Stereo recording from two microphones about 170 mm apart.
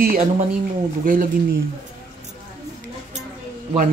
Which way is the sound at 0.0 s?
55° right (ahead or behind).